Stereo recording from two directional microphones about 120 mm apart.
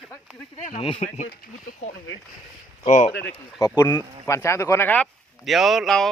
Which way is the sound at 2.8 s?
70° left (ahead or behind).